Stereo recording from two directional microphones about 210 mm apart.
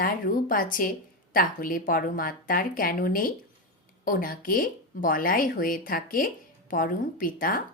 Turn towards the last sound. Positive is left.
turn(degrees=40)  # may be behind; listen again after turning